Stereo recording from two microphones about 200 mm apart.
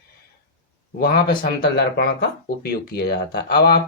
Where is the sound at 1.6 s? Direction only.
50° left (ahead or behind).